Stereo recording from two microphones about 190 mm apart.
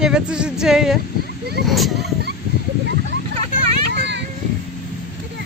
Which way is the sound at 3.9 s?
60° right (ahead or behind).